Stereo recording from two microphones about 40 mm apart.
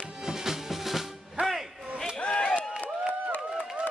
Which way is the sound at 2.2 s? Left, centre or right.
Left.